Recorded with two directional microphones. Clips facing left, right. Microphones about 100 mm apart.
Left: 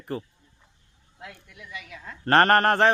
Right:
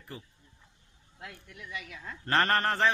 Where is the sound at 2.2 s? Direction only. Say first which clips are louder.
Left 8 dB; 60° left (ahead or behind).